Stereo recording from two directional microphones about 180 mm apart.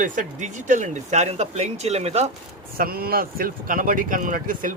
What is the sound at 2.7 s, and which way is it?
Speech, 55° right (ahead or behind).